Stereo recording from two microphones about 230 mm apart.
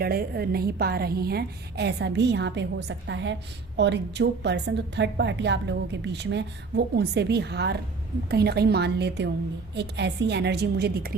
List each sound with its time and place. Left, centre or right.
0.0 s a woman's voice: right